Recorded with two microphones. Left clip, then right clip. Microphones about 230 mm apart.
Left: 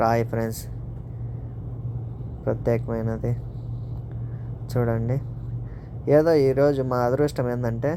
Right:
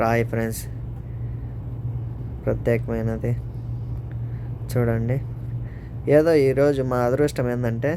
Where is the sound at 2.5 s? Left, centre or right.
Centre.